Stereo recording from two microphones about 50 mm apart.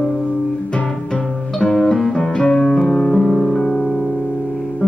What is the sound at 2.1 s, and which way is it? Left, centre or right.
Music, centre.